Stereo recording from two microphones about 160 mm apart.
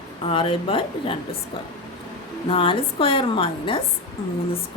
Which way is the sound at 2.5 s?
35° left (ahead or behind).